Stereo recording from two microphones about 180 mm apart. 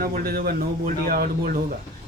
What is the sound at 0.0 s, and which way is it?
Speech, 55° right (ahead or behind).